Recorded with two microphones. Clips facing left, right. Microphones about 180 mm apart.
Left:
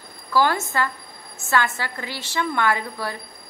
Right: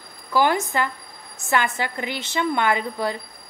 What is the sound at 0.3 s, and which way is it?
A woman's voice, 15° right (ahead or behind).